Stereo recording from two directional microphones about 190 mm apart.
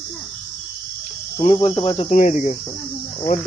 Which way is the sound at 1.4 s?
30° left (ahead or behind).